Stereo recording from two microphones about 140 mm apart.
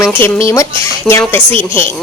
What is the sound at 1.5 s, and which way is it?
Speech, 15° left (ahead or behind).